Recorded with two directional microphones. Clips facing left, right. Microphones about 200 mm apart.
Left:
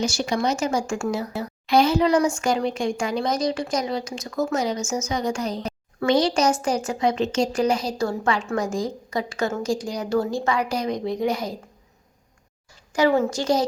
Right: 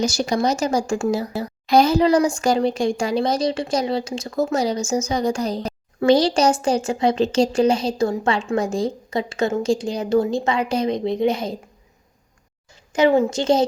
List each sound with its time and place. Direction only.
0.0 s a woman's voice: 40° right (ahead or behind)
12.9 s a woman's voice: 20° right (ahead or behind)